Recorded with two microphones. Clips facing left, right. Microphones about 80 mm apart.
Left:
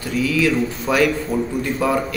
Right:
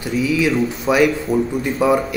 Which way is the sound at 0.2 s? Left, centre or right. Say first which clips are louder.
Right 1 dB; centre.